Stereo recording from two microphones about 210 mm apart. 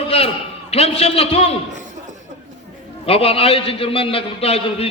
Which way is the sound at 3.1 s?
30° left (ahead or behind).